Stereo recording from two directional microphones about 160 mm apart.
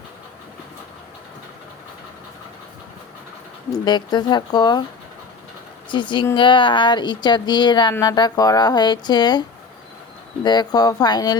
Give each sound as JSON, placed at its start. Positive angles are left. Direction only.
{"t": 3.7, "sound": "speech", "side_deg": 25}
{"t": 5.9, "sound": "speech", "side_deg": 30}
{"t": 10.4, "sound": "speech", "side_deg": 25}